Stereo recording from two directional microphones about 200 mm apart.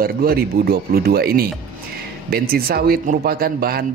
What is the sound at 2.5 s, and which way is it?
Speech, 50° right (ahead or behind).